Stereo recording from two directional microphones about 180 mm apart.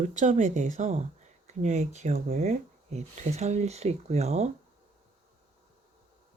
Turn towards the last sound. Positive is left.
turn(degrees=-35)  # may be behind; listen again after turning